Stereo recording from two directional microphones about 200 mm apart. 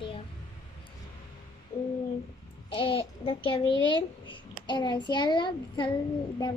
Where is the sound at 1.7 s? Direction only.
30° left (ahead or behind).